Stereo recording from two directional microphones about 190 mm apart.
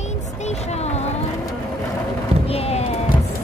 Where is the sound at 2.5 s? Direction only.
35° left (ahead or behind).